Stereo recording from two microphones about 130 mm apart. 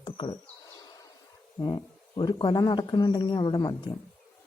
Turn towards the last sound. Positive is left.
turn(degrees=30)  # may be behind; listen again after turning